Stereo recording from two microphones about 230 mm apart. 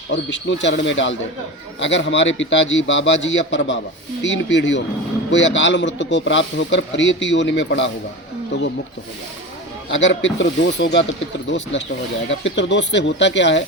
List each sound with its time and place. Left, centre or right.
0.1 s speech: left
9.9 s speech: left